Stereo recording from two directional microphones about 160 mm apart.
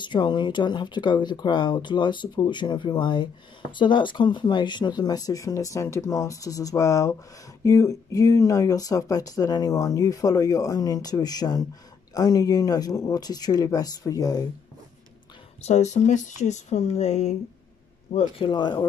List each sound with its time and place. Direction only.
0.0 s speech: 30° left (ahead or behind)
15.6 s speech: 45° left (ahead or behind)
18.1 s speech: 30° left (ahead or behind)